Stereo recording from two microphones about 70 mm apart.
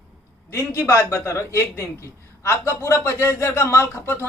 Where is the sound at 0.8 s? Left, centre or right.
Left.